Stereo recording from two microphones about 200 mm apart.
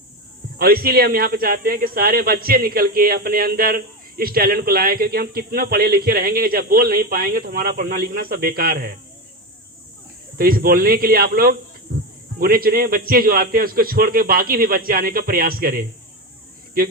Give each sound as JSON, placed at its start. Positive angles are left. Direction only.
{"t": 0.6, "sound": "speech", "side_deg": -50}
{"t": 10.3, "sound": "speech", "side_deg": -45}
{"t": 11.9, "sound": "hum", "side_deg": -45}
{"t": 12.4, "sound": "speech", "side_deg": -45}